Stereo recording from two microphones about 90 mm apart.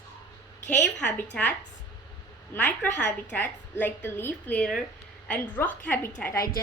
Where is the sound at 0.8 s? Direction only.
15° left (ahead or behind).